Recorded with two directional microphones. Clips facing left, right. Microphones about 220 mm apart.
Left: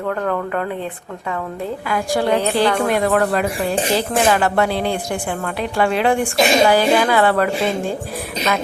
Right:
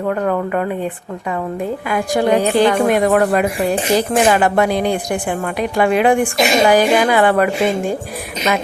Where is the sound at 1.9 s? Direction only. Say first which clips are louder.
Right 3 dB; 20° right (ahead or behind).